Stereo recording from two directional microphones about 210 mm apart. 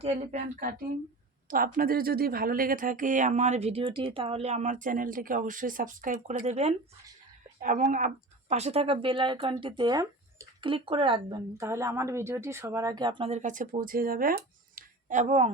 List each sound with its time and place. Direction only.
0.0 s speech: 30° right (ahead or behind)